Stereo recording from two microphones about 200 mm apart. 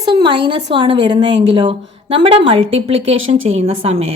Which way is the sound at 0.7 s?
25° right (ahead or behind).